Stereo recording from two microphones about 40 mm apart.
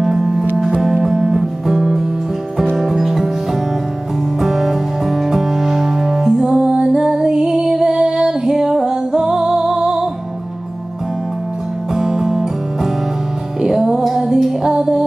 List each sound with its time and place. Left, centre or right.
0.0 s music: centre
4.4 s music: centre
6.6 s music: right
11.9 s music: centre
13.6 s music: centre